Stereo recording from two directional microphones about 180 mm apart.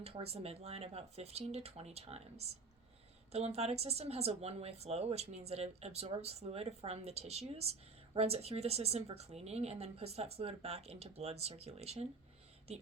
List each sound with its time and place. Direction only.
0.0 s speech: 35° right (ahead or behind)